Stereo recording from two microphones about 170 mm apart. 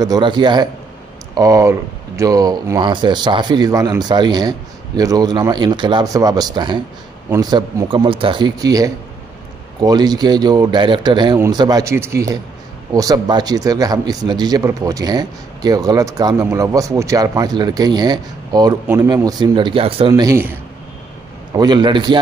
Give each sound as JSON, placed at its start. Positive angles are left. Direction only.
{"t": 0.0, "sound": "speech", "side_deg": -25}
{"t": 20.1, "sound": "speech", "side_deg": -20}
{"t": 21.5, "sound": "speech", "side_deg": -25}